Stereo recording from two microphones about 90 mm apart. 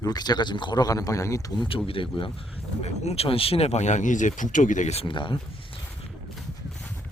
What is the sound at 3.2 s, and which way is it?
Speech, 90° left.